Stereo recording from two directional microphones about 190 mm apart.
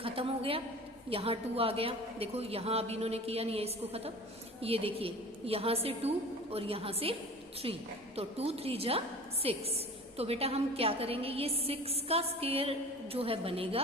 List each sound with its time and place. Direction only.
0.0 s a woman's voice: 30° right (ahead or behind)